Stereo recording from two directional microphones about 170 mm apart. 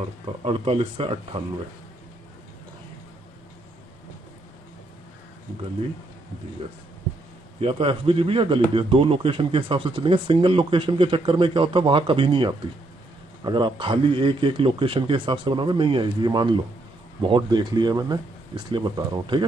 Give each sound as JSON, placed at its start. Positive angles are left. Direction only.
{"t": 0.0, "sound": "a man's voice", "side_deg": -35}
{"t": 7.6, "sound": "a man's voice", "side_deg": -30}